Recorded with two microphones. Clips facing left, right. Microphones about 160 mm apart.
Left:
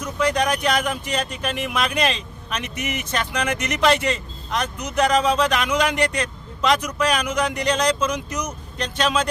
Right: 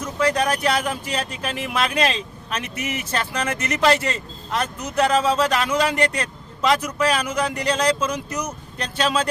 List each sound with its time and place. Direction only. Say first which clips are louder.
0.0 s speech: even; 5° right (ahead or behind)